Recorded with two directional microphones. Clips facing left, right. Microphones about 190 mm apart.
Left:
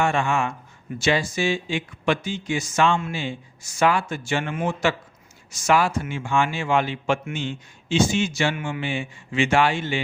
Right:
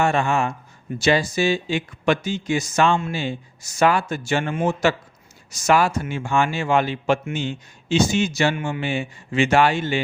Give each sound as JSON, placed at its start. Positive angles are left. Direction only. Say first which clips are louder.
{"t": 0.0, "sound": "a man's voice", "louder": "right 2 dB", "side_deg": -40}